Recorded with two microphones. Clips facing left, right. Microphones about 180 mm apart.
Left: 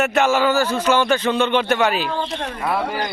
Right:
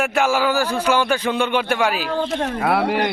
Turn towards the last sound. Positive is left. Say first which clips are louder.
# right 4 dB
turn(degrees=-65)  # may be behind; listen again after turning